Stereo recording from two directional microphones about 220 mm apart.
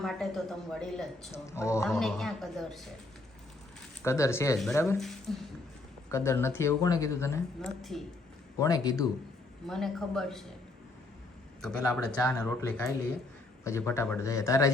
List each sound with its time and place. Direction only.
0.0 s a woman's voice: centre (ahead or behind)
1.3 s speech: 10° left (ahead or behind)
1.9 s a woman's voice: centre (ahead or behind)
4.0 s a woman's voice: 10° left (ahead or behind)
7.8 s a woman's voice: centre (ahead or behind)
8.5 s speech: 15° left (ahead or behind)
9.6 s a woman's voice: centre (ahead or behind)
11.6 s speech: 5° left (ahead or behind)